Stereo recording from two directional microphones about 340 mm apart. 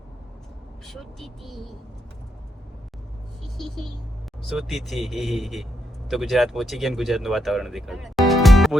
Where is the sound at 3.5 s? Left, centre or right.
Centre.